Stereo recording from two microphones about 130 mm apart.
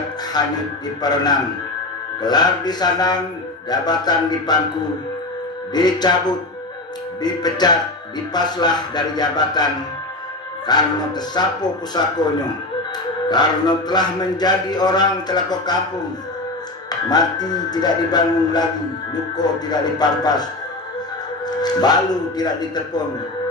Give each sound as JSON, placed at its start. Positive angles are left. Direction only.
{"t": 0.4, "sound": "speech", "side_deg": 30}
{"t": 5.7, "sound": "speech", "side_deg": 30}
{"t": 10.7, "sound": "speech", "side_deg": 30}
{"t": 16.9, "sound": "speech", "side_deg": 30}
{"t": 21.5, "sound": "speech", "side_deg": 30}